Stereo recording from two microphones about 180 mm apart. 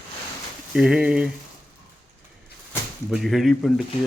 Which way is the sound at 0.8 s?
5° right (ahead or behind).